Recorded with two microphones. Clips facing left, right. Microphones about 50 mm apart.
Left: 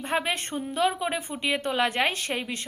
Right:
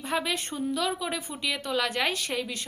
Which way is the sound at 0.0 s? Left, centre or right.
Left.